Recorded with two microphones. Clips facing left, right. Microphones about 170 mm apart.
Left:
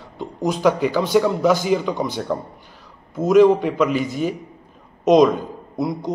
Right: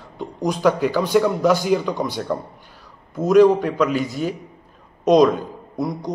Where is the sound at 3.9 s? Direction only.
45° right (ahead or behind).